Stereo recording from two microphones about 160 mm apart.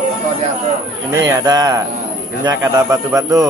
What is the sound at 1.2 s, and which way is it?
A man's voice, 20° right (ahead or behind).